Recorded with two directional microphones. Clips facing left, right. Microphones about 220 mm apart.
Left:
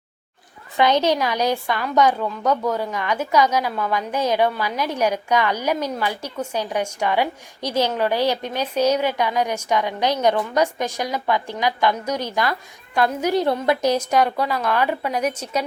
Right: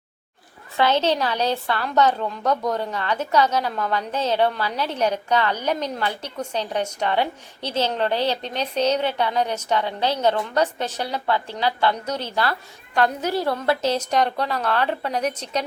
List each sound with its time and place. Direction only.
0.8 s a woman's voice: 15° left (ahead or behind)